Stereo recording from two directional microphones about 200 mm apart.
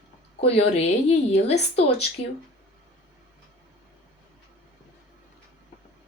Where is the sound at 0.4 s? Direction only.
30° left (ahead or behind).